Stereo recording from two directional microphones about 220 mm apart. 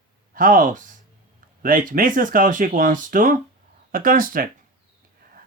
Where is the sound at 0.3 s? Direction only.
40° right (ahead or behind).